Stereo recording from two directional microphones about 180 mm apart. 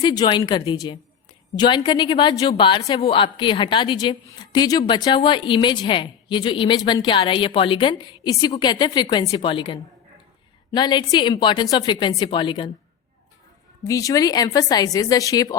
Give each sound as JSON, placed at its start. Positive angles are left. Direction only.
{"t": 0.0, "sound": "a woman's voice", "side_deg": 20}
{"t": 10.8, "sound": "a woman's voice", "side_deg": 25}
{"t": 13.8, "sound": "a woman's voice", "side_deg": 20}